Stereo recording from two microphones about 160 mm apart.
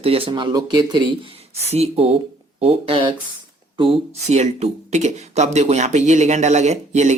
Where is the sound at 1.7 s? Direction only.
40° right (ahead or behind).